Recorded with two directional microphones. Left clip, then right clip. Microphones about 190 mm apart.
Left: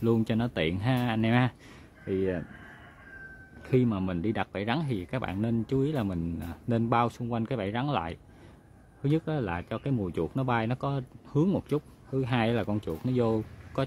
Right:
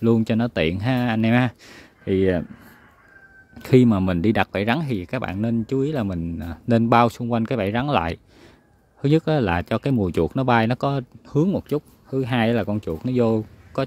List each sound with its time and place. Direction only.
0.0 s speech: 30° right (ahead or behind); by 2.4 s 50° right (ahead or behind)
3.6 s speech: 55° right (ahead or behind); by 13.8 s 30° right (ahead or behind)